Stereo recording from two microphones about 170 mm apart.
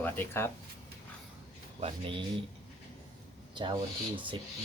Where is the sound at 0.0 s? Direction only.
15° left (ahead or behind).